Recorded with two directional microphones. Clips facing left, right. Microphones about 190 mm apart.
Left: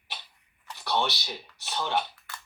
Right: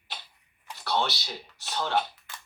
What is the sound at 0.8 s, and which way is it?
Speech, 15° left (ahead or behind).